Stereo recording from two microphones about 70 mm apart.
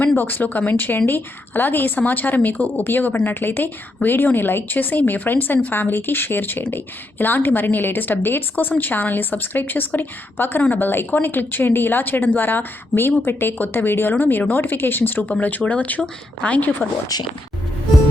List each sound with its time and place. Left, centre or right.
0.2 s speech: left